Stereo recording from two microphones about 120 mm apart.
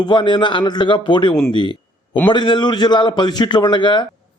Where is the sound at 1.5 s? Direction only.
40° left (ahead or behind).